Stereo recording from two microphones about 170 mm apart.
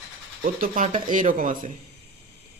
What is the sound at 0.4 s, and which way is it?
Speech, 55° right (ahead or behind).